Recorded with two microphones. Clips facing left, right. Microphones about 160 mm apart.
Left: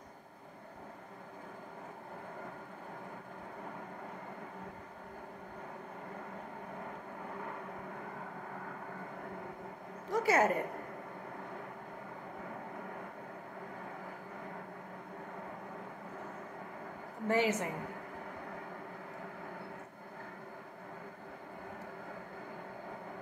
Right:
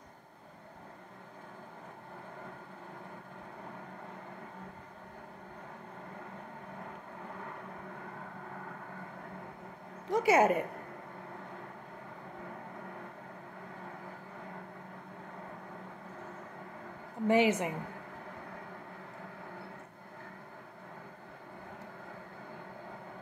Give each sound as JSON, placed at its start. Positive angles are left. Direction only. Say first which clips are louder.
{"t": 10.0, "sound": "a woman's voice", "louder": "right 4 dB", "side_deg": -20}
{"t": 17.3, "sound": "a woman's voice", "louder": "right 4 dB", "side_deg": -20}